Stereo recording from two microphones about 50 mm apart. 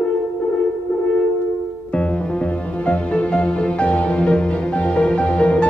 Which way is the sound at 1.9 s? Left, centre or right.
Left.